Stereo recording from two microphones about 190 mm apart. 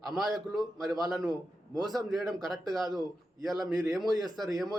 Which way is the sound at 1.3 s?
20° right (ahead or behind).